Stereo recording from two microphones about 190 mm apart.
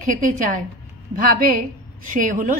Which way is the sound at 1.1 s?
45° right (ahead or behind).